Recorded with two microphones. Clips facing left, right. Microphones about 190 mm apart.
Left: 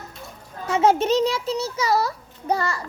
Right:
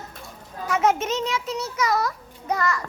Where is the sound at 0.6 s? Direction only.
30° left (ahead or behind).